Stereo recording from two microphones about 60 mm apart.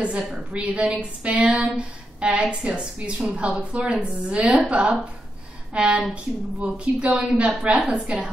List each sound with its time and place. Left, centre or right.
0.0 s a woman's voice: centre